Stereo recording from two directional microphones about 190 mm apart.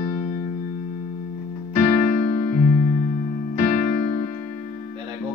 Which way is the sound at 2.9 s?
30° left (ahead or behind).